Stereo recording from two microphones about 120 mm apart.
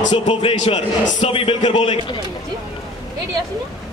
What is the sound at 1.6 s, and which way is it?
Speech, 70° left (ahead or behind).